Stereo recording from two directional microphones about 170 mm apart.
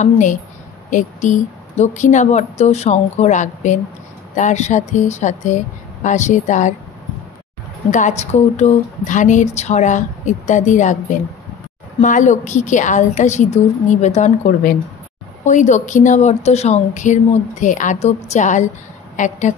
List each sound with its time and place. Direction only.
0.0 s speech: 45° left (ahead or behind)
7.9 s speech: 45° left (ahead or behind)